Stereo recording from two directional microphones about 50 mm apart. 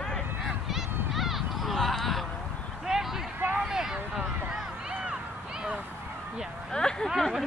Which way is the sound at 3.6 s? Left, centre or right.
Centre.